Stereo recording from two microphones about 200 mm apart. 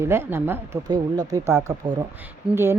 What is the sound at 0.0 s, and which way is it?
A woman's voice, 10° right (ahead or behind).